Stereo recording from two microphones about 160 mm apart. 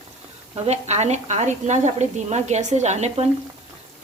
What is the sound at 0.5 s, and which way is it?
Speech, 45° right (ahead or behind).